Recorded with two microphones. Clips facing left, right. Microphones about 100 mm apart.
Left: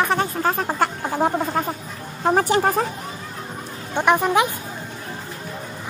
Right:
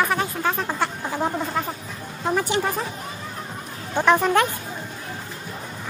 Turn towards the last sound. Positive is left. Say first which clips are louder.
# even
turn(degrees=15)  # may be behind; listen again after turning